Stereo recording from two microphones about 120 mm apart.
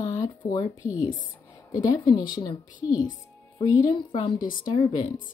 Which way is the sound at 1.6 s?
30° left (ahead or behind).